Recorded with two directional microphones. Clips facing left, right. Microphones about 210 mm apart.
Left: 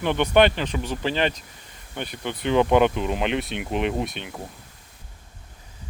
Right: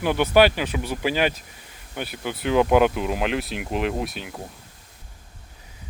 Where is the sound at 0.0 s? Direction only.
5° right (ahead or behind).